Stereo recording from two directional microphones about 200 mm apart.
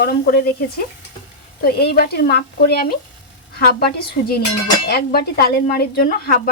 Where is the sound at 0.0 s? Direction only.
50° left (ahead or behind).